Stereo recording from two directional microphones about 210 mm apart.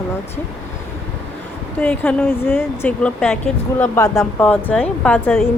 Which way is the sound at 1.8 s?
5° left (ahead or behind).